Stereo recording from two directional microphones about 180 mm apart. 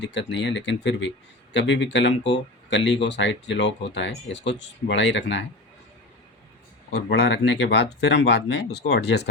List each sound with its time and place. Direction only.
0.0 s speech: 80° left
6.9 s speech: 65° left (ahead or behind)